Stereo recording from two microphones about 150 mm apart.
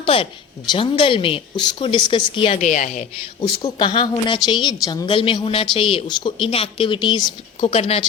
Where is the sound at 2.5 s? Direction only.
55° left (ahead or behind).